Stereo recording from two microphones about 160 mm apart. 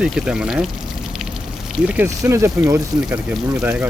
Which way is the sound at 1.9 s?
15° right (ahead or behind).